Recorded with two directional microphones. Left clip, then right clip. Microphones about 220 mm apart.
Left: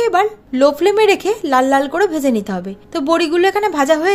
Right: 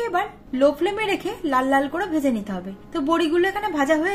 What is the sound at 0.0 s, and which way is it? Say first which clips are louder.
A woman's voice: left 10 dB; 45° left (ahead or behind).